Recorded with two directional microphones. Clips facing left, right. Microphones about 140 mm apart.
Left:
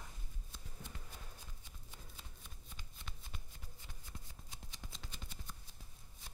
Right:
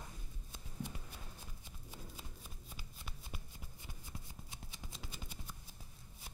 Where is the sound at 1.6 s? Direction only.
5° right (ahead or behind).